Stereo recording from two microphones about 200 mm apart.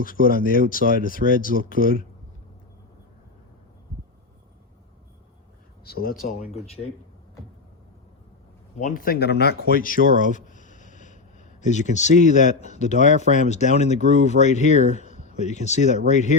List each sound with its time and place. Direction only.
0.0 s speech: 45° left (ahead or behind)
5.8 s speech: 50° left (ahead or behind)
8.8 s speech: 45° left (ahead or behind)
14.8 s a sound: 35° left (ahead or behind)
15.4 s speech: 35° left (ahead or behind)